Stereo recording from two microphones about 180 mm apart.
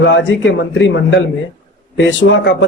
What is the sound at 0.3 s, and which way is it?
Speech, 90° left.